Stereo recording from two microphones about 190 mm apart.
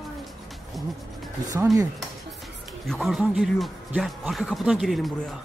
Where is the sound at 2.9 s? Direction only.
Centre (ahead or behind).